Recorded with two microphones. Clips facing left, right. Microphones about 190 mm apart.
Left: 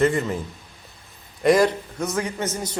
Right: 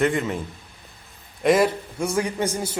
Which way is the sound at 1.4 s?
Centre (ahead or behind).